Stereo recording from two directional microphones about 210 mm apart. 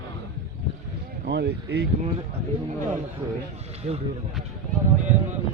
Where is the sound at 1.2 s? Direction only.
55° right (ahead or behind).